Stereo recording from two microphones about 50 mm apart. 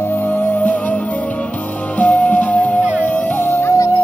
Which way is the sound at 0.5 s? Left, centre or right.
Left.